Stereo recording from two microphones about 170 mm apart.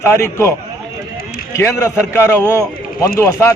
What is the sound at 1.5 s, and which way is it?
Speech, 15° left (ahead or behind).